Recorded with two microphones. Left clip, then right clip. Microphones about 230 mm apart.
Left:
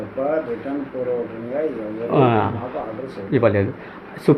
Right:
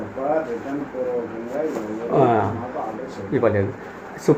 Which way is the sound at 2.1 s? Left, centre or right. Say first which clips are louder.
Even; left.